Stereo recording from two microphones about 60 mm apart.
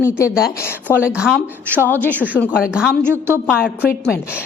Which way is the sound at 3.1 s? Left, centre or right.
Right.